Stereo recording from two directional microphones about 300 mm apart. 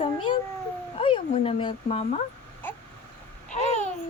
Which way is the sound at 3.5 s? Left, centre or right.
Left.